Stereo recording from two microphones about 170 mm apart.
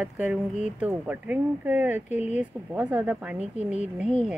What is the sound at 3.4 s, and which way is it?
Speech, 35° right (ahead or behind).